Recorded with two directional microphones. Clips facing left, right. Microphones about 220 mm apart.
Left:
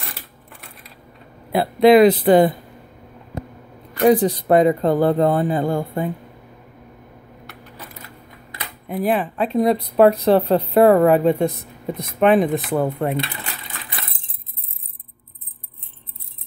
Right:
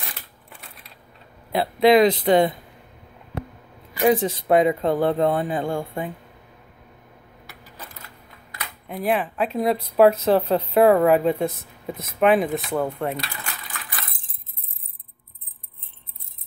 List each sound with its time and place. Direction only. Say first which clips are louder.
0.5 s typewriter: left 3 dB; centre (ahead or behind)
1.5 s speech: left 4 dB; centre (ahead or behind)
4.1 s speech: left 4 dB; centre (ahead or behind)
8.8 s speech: left 3 dB; centre (ahead or behind)
13.1 s coin: left 6 dB; 25° left (ahead or behind)